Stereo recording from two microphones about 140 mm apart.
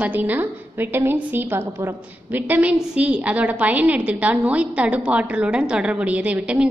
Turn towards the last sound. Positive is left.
turn(degrees=-10)  # may be behind; listen again after turning